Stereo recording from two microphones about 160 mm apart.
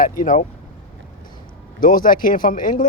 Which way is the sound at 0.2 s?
55° left (ahead or behind).